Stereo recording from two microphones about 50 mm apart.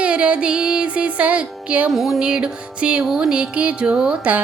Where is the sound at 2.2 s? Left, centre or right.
Centre.